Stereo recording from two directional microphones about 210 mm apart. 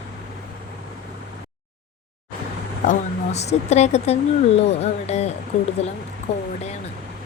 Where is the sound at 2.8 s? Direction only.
35° left (ahead or behind).